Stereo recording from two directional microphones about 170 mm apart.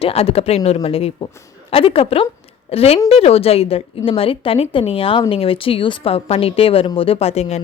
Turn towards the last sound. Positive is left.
turn(degrees=40)  # may be behind; listen again after turning